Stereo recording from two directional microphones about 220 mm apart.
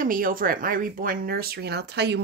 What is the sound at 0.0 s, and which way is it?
Speech, 40° right (ahead or behind).